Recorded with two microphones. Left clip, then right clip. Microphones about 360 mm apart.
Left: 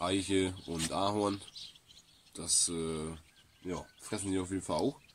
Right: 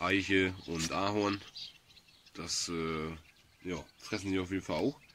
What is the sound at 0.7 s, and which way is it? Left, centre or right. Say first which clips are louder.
Speech: even; left.